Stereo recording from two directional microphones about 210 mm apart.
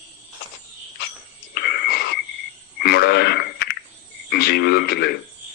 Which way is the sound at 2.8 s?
50° left (ahead or behind).